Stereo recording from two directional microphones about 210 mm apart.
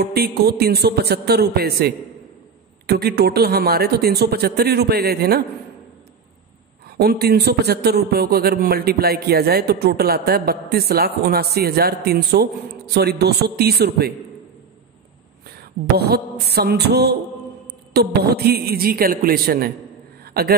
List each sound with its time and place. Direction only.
0.0 s a man's voice: 50° right (ahead or behind)
7.0 s a man's voice: 50° right (ahead or behind)
16.0 s a man's voice: 50° right (ahead or behind)